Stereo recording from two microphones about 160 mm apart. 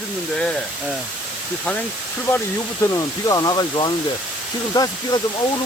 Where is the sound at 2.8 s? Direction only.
20° left (ahead or behind).